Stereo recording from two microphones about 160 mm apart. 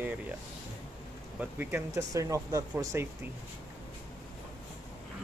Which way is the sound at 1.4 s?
10° right (ahead or behind).